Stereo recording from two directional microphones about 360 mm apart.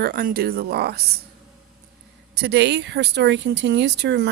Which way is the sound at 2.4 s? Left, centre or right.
Right.